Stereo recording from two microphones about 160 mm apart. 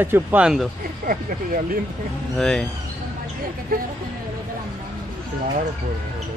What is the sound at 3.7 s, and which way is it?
Speech, 65° right (ahead or behind).